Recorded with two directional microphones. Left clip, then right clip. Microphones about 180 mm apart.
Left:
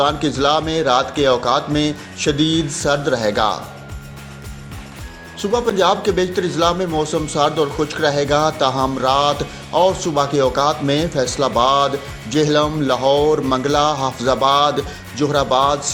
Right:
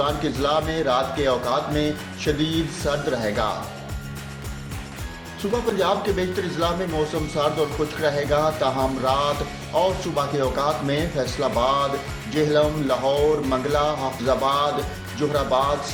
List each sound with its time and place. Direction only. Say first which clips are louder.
0.0 s speech: left 6 dB; 45° left (ahead or behind)
5.4 s speech: left 6 dB; 45° left (ahead or behind)